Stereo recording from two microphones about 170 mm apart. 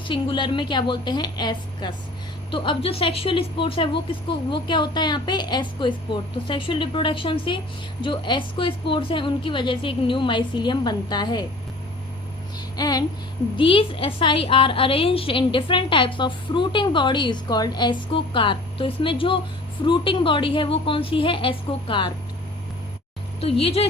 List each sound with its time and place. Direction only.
0.1 s a woman's voice: 30° left (ahead or behind)
12.5 s child singing: 25° left (ahead or behind)
13.6 s a woman's voice: 30° left (ahead or behind)
23.4 s a woman's voice: 35° left (ahead or behind)